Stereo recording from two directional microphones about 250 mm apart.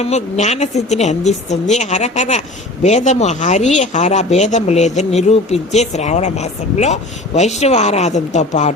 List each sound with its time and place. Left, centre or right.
0.0 s speech: left